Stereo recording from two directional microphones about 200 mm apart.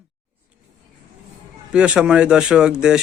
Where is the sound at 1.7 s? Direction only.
5° right (ahead or behind).